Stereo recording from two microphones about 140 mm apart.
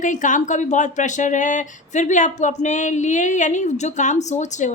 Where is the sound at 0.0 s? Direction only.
65° left (ahead or behind).